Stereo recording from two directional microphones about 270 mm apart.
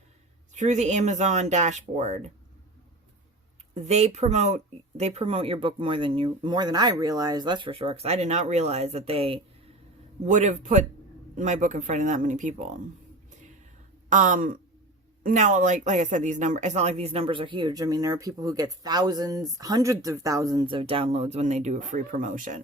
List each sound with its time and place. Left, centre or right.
0.5 s speech: right
3.8 s speech: right
14.1 s speech: right